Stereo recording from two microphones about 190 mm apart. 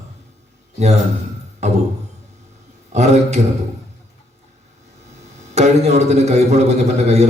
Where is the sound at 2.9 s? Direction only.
35° right (ahead or behind).